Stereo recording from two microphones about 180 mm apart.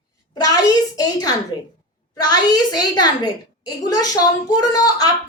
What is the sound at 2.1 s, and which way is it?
Speech, 20° left (ahead or behind).